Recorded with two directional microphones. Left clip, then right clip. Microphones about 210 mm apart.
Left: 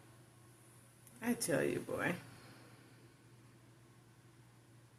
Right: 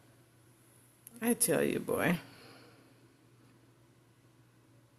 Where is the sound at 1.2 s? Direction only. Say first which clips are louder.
Right 6 dB; 50° right (ahead or behind).